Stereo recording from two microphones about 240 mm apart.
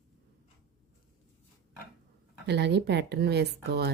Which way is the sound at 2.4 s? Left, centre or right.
Right.